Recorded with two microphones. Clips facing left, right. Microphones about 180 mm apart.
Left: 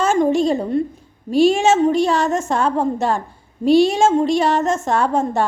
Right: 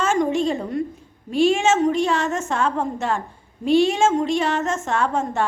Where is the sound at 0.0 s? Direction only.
35° left (ahead or behind).